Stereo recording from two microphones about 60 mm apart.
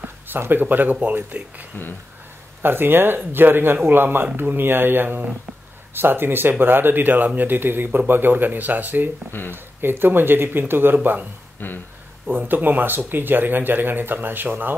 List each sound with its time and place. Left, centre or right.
0.3 s speech: right
2.6 s speech: right
11.6 s speech: left
12.3 s speech: right